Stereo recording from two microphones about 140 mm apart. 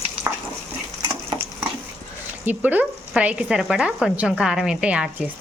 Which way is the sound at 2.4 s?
10° right (ahead or behind).